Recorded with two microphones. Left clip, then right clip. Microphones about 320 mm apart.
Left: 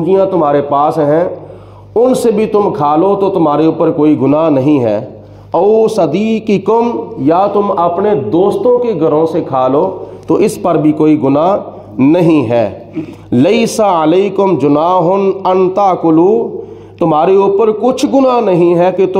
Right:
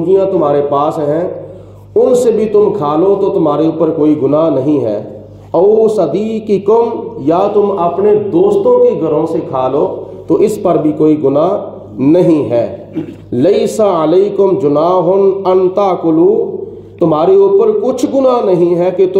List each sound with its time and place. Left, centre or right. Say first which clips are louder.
0.0 s a man's voice: even; left